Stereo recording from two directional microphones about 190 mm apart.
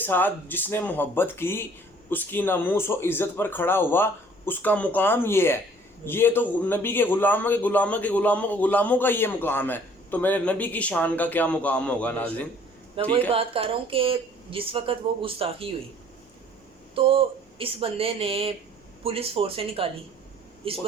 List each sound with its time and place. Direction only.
0.0 s a man's voice: 10° left (ahead or behind)
13.0 s speech: 25° right (ahead or behind)
16.9 s speech: 30° right (ahead or behind)